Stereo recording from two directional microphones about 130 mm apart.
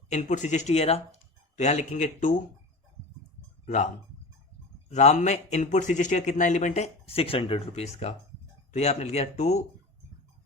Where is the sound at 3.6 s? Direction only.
65° left (ahead or behind).